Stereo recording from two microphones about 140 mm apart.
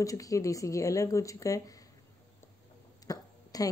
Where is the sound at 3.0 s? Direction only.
25° left (ahead or behind).